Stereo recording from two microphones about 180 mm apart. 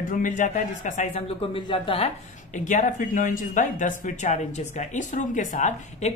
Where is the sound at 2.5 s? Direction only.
45° left (ahead or behind).